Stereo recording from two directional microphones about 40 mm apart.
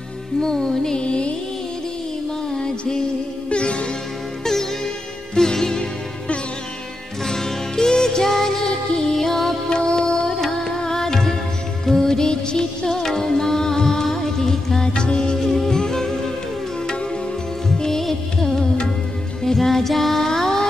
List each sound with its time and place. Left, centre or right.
0.4 s music: centre
0.9 s music: left
2.5 s music: centre
5.3 s music: centre
7.2 s music: centre
9.7 s music: left
15.3 s music: centre
17.6 s music: centre